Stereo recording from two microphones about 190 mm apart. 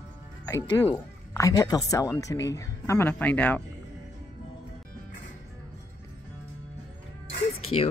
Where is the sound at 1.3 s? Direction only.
15° left (ahead or behind).